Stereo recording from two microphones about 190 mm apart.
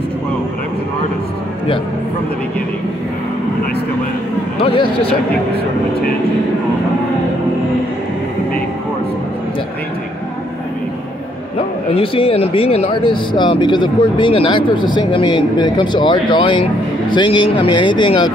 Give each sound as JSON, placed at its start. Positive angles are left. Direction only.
{"t": 11.9, "sound": "speech", "side_deg": 30}